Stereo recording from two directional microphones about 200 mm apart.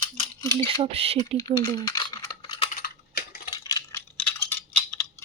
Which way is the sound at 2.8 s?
50° left (ahead or behind).